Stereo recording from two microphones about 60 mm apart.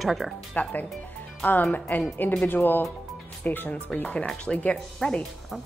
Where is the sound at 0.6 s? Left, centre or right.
Left.